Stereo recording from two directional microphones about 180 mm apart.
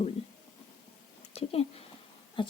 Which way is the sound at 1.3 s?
35° left (ahead or behind).